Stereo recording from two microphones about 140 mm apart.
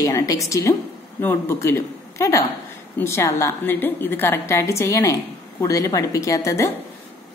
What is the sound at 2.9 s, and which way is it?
A woman's voice, 20° left (ahead or behind).